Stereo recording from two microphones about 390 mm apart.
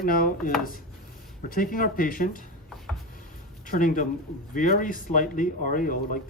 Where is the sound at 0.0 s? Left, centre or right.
Left.